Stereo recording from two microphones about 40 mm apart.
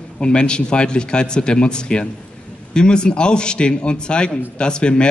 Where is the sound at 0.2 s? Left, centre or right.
Left.